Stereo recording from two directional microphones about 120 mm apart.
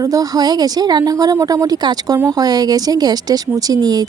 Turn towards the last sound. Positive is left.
turn(degrees=-30)  # may be behind; listen again after turning